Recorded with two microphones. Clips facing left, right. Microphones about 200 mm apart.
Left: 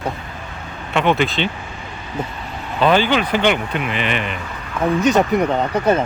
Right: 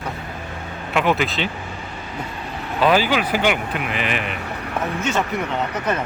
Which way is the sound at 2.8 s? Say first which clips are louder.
Left 2 dB; 5° right (ahead or behind).